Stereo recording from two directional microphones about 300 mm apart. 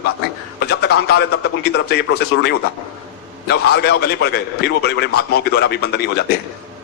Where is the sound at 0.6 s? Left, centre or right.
Left.